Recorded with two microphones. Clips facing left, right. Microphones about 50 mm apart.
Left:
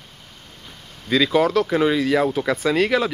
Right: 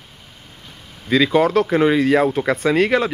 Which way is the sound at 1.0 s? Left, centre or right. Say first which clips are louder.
Right 2 dB; centre.